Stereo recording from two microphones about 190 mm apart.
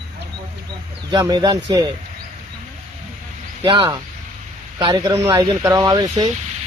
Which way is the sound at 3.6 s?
25° right (ahead or behind).